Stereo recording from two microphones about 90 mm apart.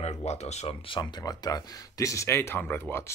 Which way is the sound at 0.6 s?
70° left (ahead or behind).